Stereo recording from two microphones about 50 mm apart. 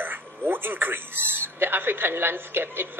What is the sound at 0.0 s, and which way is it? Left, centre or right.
A woman's voice, right.